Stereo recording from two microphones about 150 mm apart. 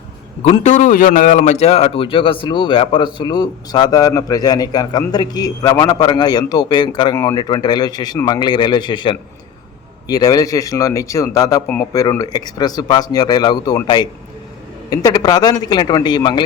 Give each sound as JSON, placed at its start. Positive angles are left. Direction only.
{"t": 0.4, "sound": "a man's voice", "side_deg": 50}